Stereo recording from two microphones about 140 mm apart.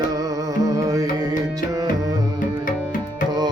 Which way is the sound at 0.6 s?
25° right (ahead or behind).